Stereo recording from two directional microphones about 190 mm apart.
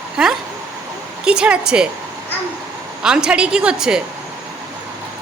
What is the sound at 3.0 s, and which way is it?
A woman's voice, 5° right (ahead or behind).